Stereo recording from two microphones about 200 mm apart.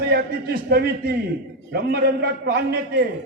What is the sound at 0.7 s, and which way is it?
A man's voice, 50° right (ahead or behind).